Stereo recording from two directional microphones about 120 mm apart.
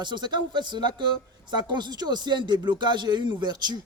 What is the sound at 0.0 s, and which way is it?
Speech, 40° right (ahead or behind).